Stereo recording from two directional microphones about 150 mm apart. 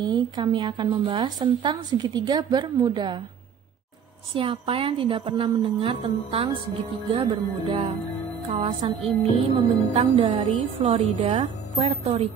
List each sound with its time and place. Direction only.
0.0 s speech: 30° right (ahead or behind)
4.3 s a woman's voice: 35° right (ahead or behind)